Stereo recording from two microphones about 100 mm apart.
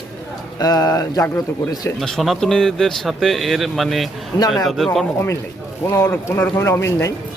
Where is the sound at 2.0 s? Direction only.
Centre (ahead or behind).